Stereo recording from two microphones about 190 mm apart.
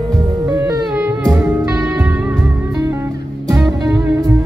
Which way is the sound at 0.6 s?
20° right (ahead or behind).